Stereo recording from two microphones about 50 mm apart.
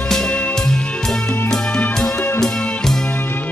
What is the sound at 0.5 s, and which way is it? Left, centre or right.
Music, centre.